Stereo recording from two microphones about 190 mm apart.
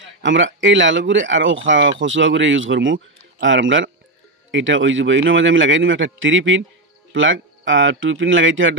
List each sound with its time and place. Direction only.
0.2 s speech: 75° right (ahead or behind)